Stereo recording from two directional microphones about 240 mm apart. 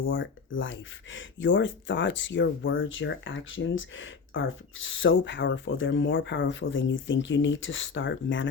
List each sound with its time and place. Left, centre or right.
0.1 s speech: left